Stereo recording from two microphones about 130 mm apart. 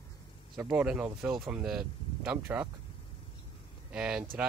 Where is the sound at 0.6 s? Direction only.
10° right (ahead or behind).